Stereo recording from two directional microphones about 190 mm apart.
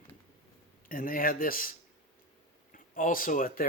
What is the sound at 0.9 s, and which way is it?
Speech, 45° left (ahead or behind).